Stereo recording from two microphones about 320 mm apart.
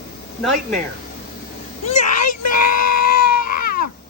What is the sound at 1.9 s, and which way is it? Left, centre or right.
Speech, left.